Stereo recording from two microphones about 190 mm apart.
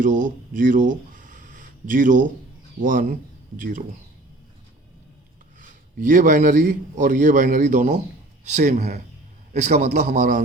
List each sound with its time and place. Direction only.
0.0 s a man's voice: 45° right (ahead or behind)
5.5 s a man's voice: 45° right (ahead or behind)